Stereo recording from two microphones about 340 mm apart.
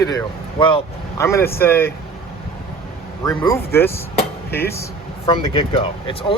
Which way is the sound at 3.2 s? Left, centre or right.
Centre.